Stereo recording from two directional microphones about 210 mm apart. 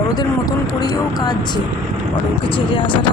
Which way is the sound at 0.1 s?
20° left (ahead or behind).